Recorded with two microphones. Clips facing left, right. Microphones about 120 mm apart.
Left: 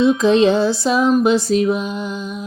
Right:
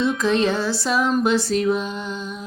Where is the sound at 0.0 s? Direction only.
20° left (ahead or behind).